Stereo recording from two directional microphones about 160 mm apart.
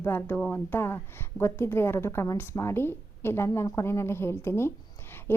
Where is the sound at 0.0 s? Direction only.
15° left (ahead or behind).